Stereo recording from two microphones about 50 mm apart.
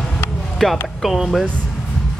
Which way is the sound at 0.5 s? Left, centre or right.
Centre.